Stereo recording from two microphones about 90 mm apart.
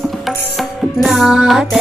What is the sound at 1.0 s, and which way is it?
Music, centre (ahead or behind).